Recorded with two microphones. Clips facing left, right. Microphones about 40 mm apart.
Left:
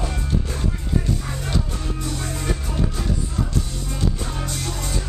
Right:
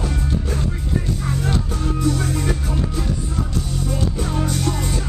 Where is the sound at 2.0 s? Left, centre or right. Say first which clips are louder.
Right 10 dB; centre.